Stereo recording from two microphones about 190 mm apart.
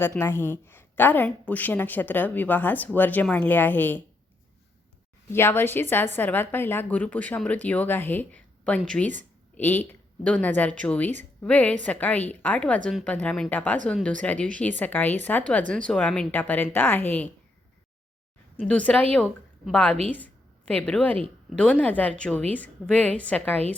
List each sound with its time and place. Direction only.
0.0 s a woman's voice: 15° left (ahead or behind)
5.3 s a woman's voice: 10° left (ahead or behind)
18.5 s a woman's voice: 5° left (ahead or behind)